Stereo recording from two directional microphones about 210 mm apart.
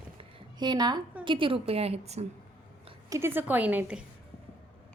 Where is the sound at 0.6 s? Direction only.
20° right (ahead or behind).